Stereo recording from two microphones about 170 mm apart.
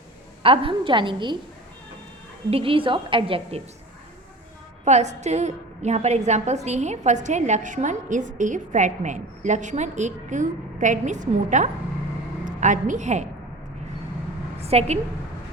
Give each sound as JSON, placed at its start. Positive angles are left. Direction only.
{"t": 0.4, "sound": "a woman's voice", "side_deg": -30}
{"t": 2.5, "sound": "a woman's voice", "side_deg": -35}
{"t": 4.9, "sound": "a woman's voice", "side_deg": -40}
{"t": 14.6, "sound": "a sound", "side_deg": -40}